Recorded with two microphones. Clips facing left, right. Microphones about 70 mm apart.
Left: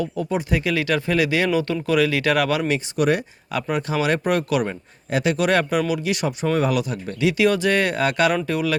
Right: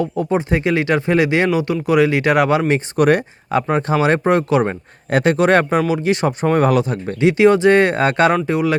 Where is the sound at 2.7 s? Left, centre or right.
Right.